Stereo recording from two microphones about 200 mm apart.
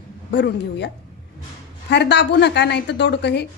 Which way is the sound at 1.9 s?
60° left (ahead or behind).